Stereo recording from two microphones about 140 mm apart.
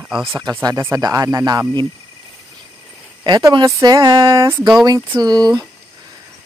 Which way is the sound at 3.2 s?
30° right (ahead or behind).